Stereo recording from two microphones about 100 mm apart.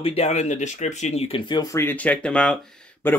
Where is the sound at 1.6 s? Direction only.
30° left (ahead or behind).